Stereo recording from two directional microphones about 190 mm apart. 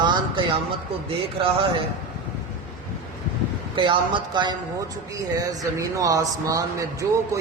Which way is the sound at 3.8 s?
25° right (ahead or behind).